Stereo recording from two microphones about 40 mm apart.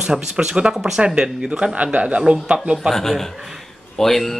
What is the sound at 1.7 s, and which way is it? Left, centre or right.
Speech, right.